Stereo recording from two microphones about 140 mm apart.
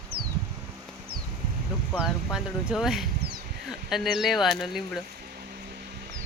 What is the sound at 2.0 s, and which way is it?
Speech, 5° right (ahead or behind).